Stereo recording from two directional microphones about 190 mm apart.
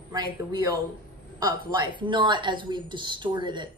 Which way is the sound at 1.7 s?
25° right (ahead or behind).